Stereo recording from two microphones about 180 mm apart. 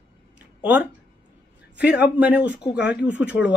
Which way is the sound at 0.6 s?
10° right (ahead or behind).